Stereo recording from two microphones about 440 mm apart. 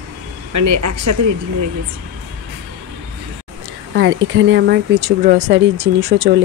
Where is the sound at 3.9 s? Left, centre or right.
Right.